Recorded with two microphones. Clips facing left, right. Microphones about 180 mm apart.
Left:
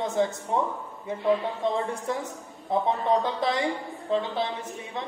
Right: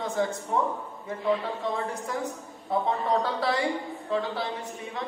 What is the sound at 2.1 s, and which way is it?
Speech, 25° left (ahead or behind).